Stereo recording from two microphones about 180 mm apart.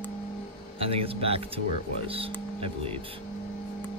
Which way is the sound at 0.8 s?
30° right (ahead or behind).